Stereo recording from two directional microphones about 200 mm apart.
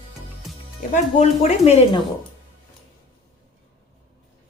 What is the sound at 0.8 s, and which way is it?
Speech, 35° left (ahead or behind).